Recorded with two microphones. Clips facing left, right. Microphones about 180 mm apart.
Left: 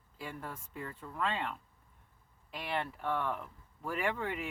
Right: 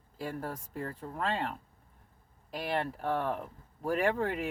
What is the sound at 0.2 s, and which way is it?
Speech, 40° right (ahead or behind).